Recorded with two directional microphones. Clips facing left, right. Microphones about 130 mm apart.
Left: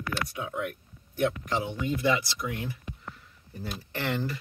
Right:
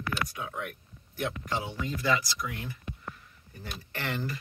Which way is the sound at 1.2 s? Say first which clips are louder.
Left 5 dB; 20° left (ahead or behind).